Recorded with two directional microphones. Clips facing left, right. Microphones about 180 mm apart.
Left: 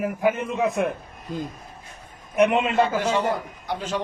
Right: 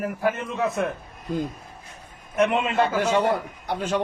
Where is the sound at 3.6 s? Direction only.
55° right (ahead or behind).